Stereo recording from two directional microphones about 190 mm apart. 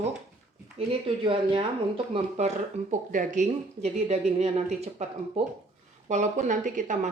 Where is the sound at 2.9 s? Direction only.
40° right (ahead or behind).